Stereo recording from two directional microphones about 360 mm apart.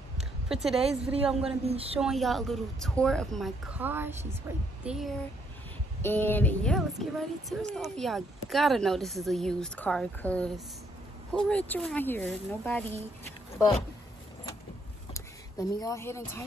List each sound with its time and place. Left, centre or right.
0.5 s a woman's voice: centre
0.7 s a woman's voice: centre
1.2 s speech: centre
1.7 s a woman's voice: centre
2.0 s speech: centre
15.1 s speech: centre